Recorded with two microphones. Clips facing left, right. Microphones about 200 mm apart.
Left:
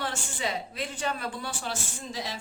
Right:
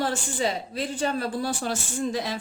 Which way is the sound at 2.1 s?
55° right (ahead or behind).